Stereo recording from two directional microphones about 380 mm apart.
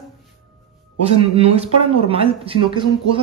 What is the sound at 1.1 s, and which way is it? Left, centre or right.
Speech, centre.